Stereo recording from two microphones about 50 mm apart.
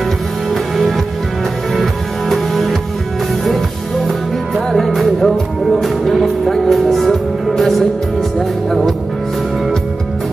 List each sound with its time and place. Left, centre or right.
1.8 s music: centre
4.7 s music: centre